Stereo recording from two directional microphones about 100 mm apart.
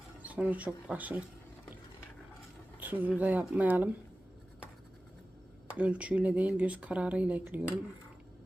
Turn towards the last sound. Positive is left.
turn(degrees=-15)  # may be behind; listen again after turning